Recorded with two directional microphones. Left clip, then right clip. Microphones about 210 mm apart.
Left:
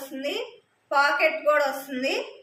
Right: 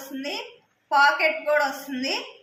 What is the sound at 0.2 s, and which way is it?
A woman's voice, 20° left (ahead or behind).